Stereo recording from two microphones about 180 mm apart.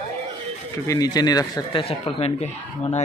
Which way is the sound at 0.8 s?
20° left (ahead or behind).